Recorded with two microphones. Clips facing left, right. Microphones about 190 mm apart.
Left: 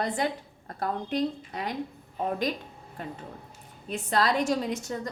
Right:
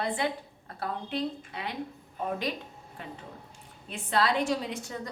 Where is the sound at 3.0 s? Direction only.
45° left (ahead or behind).